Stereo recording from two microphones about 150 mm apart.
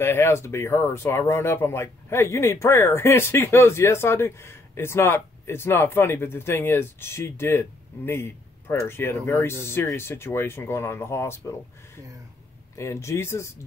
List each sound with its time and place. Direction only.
0.0 s speech: 15° left (ahead or behind)
12.7 s speech: 20° left (ahead or behind)